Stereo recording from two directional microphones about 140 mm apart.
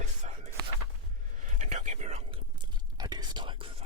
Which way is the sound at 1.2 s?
60° right (ahead or behind).